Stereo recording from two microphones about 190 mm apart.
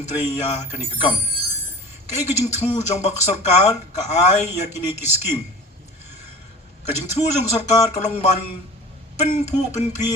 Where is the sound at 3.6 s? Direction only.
35° left (ahead or behind).